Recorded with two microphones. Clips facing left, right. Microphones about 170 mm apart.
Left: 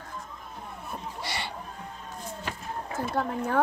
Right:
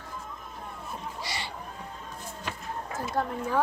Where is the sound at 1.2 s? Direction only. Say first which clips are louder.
Left 3 dB; 60° left (ahead or behind).